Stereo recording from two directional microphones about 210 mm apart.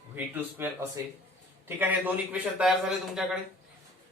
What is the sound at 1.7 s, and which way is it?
A man's voice, 10° right (ahead or behind).